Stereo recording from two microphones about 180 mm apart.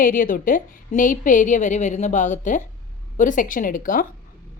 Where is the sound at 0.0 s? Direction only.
50° left (ahead or behind).